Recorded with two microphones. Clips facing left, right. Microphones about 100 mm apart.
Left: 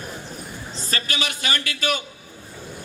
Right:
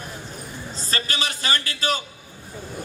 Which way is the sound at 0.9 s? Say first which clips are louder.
Even; 35° right (ahead or behind).